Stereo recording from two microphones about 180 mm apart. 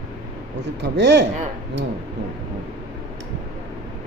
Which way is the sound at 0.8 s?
75° right (ahead or behind).